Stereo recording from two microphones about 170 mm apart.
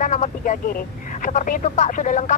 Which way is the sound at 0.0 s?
50° left (ahead or behind).